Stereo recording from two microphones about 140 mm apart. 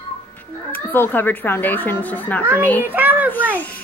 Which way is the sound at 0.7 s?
15° left (ahead or behind).